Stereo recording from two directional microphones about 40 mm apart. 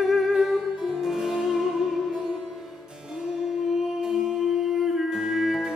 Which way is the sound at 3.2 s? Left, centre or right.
Right.